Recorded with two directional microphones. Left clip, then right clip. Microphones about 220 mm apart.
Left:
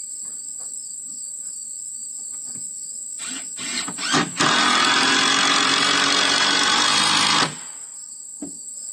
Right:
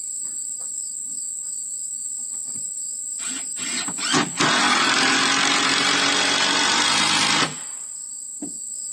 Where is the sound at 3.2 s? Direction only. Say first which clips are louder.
Even; 5° left (ahead or behind).